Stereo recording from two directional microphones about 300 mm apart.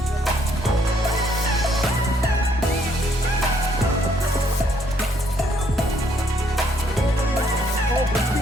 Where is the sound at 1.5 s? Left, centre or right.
Centre.